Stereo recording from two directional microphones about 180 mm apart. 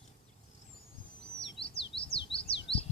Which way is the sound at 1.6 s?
30° left (ahead or behind).